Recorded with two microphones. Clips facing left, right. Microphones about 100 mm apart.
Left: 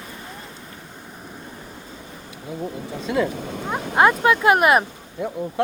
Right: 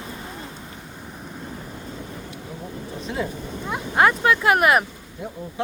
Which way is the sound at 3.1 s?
80° left.